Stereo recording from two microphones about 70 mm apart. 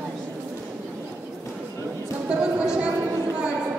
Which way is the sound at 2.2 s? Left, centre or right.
Centre.